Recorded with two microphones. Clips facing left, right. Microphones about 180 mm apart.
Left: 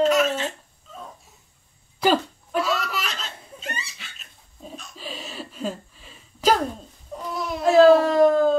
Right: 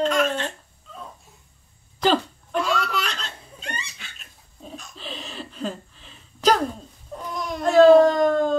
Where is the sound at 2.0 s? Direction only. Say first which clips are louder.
Even; 5° left (ahead or behind).